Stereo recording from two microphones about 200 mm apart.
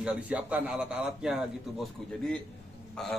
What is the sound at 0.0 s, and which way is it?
A man's voice, 5° right (ahead or behind).